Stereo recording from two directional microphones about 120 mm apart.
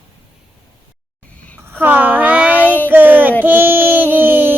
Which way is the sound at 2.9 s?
15° right (ahead or behind).